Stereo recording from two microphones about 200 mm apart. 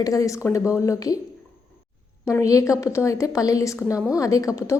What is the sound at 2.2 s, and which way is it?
A woman's voice, 15° left (ahead or behind).